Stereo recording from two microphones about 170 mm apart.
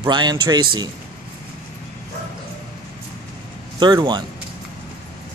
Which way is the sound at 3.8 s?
25° right (ahead or behind).